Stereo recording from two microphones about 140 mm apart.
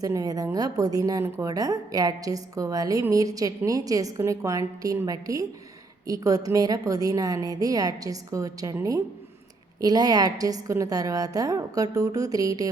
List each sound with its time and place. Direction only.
0.0 s speech: 25° right (ahead or behind)